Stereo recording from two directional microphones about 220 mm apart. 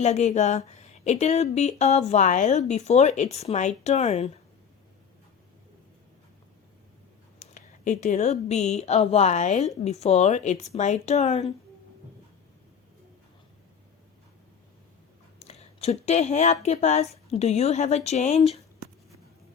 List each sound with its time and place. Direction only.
0.0 s speech: 30° left (ahead or behind)
7.3 s speech: 35° left (ahead or behind)
15.4 s speech: 30° left (ahead or behind)